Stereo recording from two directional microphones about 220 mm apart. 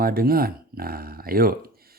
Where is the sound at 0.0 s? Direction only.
40° right (ahead or behind).